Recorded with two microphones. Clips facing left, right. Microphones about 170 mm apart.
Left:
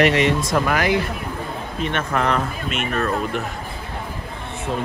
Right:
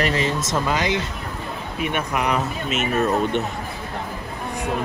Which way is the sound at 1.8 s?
10° right (ahead or behind).